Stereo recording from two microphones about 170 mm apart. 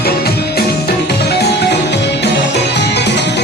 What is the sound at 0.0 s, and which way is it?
Music, 65° left (ahead or behind).